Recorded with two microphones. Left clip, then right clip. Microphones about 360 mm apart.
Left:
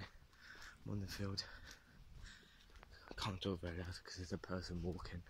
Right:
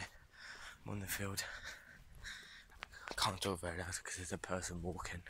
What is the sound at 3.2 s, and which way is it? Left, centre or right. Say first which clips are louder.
Speech: right 6 dB; centre.